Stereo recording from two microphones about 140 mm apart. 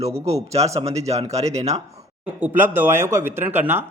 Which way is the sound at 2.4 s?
15° right (ahead or behind).